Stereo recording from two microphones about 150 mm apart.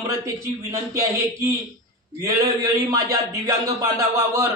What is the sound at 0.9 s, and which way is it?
A man's voice, 20° right (ahead or behind).